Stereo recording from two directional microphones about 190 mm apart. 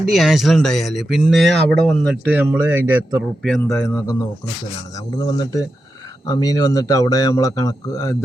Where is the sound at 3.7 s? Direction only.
15° left (ahead or behind).